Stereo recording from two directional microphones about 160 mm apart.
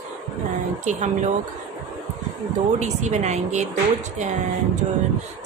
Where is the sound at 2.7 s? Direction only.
45° right (ahead or behind).